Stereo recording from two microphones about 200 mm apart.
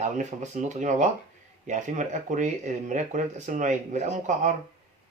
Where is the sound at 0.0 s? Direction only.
35° right (ahead or behind).